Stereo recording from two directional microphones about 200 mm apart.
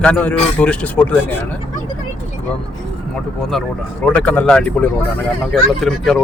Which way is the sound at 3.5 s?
Centre (ahead or behind).